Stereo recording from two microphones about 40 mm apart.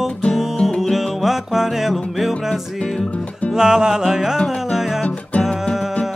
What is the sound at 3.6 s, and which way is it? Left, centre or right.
Music, centre.